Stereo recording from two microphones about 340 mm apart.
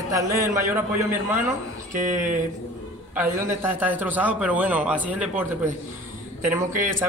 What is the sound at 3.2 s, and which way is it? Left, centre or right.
A man's voice, centre.